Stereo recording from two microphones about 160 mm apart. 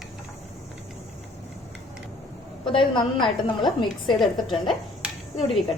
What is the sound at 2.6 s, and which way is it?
A woman's voice, 30° left (ahead or behind).